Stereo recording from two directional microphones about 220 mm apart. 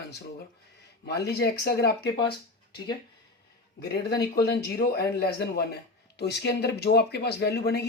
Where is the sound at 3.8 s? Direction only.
45° left (ahead or behind).